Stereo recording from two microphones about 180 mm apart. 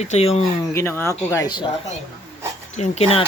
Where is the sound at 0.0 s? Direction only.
35° left (ahead or behind).